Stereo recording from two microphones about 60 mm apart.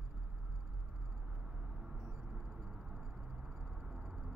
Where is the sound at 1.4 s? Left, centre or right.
Centre.